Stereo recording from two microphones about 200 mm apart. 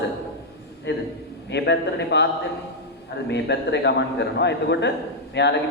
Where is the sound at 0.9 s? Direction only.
65° left (ahead or behind).